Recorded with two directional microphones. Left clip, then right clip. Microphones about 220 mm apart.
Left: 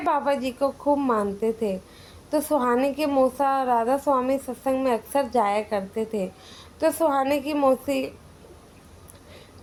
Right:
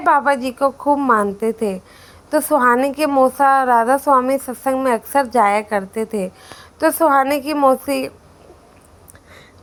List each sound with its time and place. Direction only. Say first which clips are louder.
0.0 s a woman's voice: right 8 dB; 20° right (ahead or behind)